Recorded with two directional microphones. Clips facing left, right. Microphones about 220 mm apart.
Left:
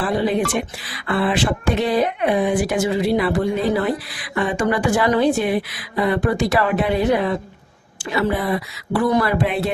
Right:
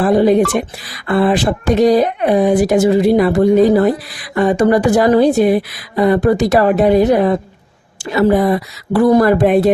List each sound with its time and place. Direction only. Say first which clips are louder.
0.0 s speech: right 9 dB; 45° right (ahead or behind)